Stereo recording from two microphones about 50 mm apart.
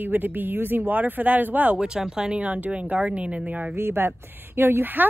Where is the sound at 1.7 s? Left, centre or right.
Centre.